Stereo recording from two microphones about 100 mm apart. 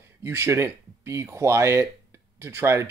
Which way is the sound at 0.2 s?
25° right (ahead or behind).